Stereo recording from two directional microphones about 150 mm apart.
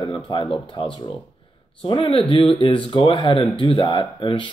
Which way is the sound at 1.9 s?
40° left (ahead or behind).